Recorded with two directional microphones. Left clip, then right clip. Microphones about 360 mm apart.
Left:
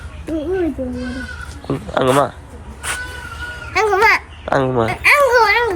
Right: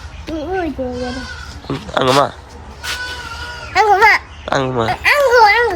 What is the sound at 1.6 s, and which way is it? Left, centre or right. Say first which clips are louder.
Speech: right 1 dB; centre.